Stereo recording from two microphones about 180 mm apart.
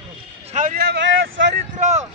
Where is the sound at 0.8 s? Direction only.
70° right (ahead or behind).